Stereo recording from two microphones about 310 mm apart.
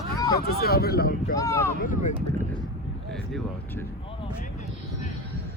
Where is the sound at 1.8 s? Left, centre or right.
Left.